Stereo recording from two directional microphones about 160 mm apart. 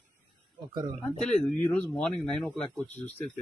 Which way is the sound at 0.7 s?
30° right (ahead or behind).